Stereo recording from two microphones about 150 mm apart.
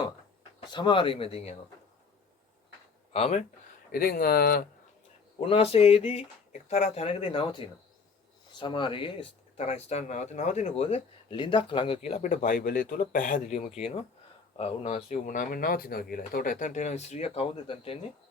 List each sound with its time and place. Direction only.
0.7 s speech: 30° left (ahead or behind)
3.1 s speech: 45° left (ahead or behind)
3.9 s speech: 80° left
5.4 s speech: 40° left (ahead or behind)